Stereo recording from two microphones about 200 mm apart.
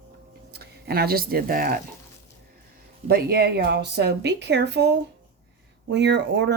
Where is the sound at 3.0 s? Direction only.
50° right (ahead or behind).